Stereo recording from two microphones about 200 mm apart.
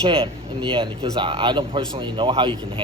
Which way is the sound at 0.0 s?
30° right (ahead or behind).